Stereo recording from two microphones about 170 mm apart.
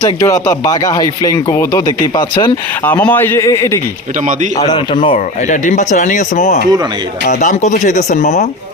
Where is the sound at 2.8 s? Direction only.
10° left (ahead or behind).